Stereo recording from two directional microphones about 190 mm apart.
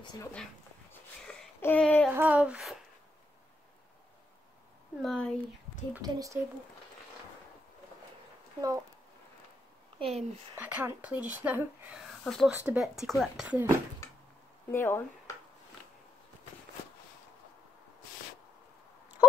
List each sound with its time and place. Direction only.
1.2 s a sound: 5° left (ahead or behind)
2.0 s speech: 10° right (ahead or behind)
5.0 s speech: 5° left (ahead or behind)
6.0 s a woman's voice: 20° right (ahead or behind)
8.5 s speech: 15° right (ahead or behind)
9.9 s speech: 30° right (ahead or behind)
10.5 s speech: 10° right (ahead or behind)
14.7 s speech: 10° left (ahead or behind)